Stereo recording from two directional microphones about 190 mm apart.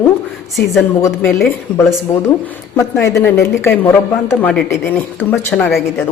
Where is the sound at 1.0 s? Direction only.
15° left (ahead or behind).